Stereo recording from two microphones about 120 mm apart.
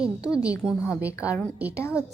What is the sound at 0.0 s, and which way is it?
A woman's voice, 5° right (ahead or behind).